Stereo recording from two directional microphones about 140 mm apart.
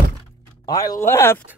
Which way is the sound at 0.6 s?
25° left (ahead or behind).